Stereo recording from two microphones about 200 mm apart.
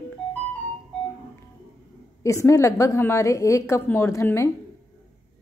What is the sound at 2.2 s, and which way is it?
A woman's voice, 15° left (ahead or behind).